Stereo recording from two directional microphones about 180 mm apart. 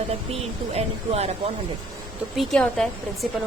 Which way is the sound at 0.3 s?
35° right (ahead or behind).